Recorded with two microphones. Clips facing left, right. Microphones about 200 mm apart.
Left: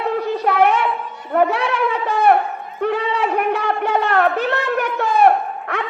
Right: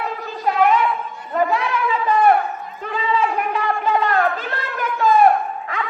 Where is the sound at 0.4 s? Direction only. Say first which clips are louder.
Right 1 dB; 75° left (ahead or behind).